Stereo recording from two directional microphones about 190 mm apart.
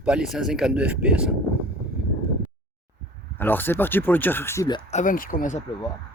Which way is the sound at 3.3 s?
10° left (ahead or behind).